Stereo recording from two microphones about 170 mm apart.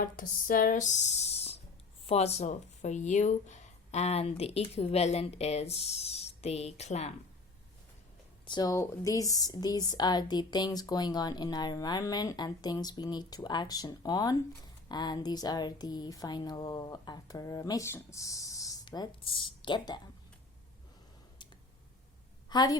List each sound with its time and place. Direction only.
0.0 s speech: 55° left (ahead or behind)
8.4 s speech: 25° left (ahead or behind)
22.4 s a woman's voice: 25° left (ahead or behind)